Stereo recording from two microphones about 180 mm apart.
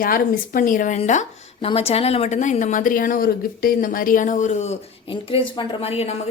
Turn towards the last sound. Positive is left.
turn(degrees=35)  # may be behind; listen again after turning